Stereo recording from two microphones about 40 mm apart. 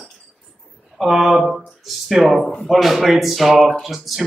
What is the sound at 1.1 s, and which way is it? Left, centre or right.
A man's voice, centre.